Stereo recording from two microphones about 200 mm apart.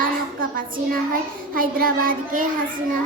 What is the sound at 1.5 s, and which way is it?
Child singing, 45° right (ahead or behind).